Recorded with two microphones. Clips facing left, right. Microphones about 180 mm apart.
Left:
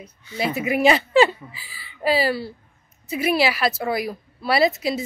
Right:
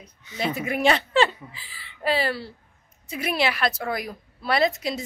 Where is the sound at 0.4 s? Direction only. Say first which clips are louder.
Left 4 dB; 5° left (ahead or behind).